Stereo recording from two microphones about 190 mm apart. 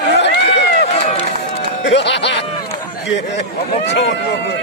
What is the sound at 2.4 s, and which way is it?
Run, 30° left (ahead or behind).